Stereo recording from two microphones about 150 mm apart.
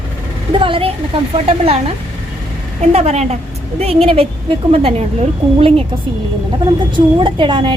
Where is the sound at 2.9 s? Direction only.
45° right (ahead or behind).